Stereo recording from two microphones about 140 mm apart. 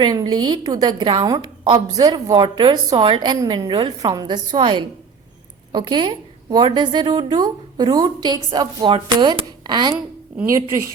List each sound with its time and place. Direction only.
0.0 s a woman's voice: 30° right (ahead or behind)